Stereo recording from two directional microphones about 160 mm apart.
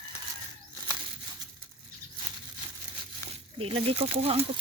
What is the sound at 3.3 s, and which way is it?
Speech, 35° right (ahead or behind).